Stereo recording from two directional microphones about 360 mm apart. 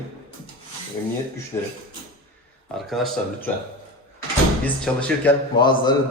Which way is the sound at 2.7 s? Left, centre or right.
Centre.